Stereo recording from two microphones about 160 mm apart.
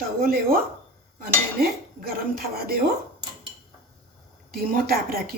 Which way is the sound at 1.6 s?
70° right (ahead or behind).